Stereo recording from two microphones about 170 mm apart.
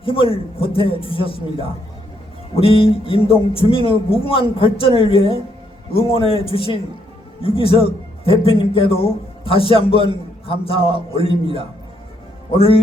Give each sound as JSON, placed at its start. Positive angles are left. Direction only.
{"t": 0.0, "sound": "a man's voice", "side_deg": 30}